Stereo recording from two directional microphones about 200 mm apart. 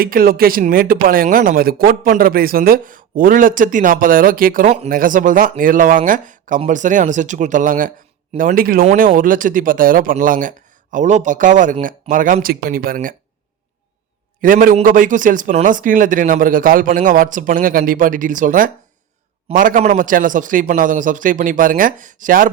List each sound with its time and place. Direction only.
0.0 s speech: 45° right (ahead or behind)
14.4 s speech: 45° right (ahead or behind)